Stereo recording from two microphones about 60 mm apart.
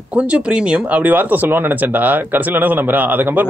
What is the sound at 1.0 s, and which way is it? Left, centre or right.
A man's voice, right.